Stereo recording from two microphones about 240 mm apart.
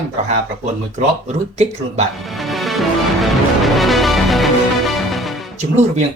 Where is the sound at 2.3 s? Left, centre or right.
Centre.